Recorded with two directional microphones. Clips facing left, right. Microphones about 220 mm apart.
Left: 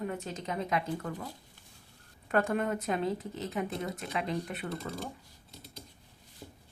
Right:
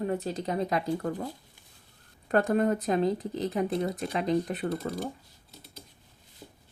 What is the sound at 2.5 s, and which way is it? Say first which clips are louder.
Speech: right 6 dB; 35° right (ahead or behind).